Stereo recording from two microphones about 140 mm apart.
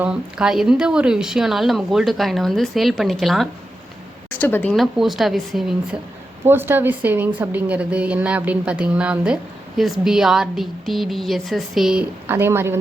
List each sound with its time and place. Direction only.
0.0 s speech: 5° right (ahead or behind)
4.3 s a woman's voice: 15° left (ahead or behind)
4.8 s speech: centre (ahead or behind)
6.4 s a woman's voice: 15° right (ahead or behind)
12.3 s a woman's voice: 15° right (ahead or behind)